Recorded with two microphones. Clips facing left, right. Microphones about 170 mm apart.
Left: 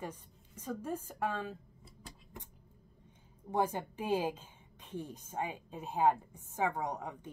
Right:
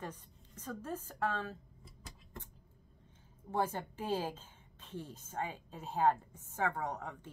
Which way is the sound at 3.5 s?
15° left (ahead or behind).